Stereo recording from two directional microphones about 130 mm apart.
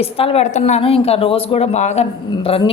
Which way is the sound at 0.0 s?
50° left (ahead or behind).